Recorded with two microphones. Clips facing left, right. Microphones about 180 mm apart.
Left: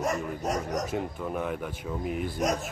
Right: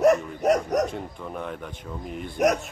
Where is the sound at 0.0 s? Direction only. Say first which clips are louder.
Right 10 dB; 70° right (ahead or behind).